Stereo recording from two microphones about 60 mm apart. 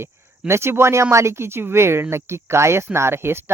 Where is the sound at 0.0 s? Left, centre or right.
Right.